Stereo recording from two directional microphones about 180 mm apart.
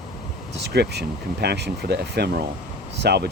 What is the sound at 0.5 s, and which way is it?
Speech, 70° right (ahead or behind).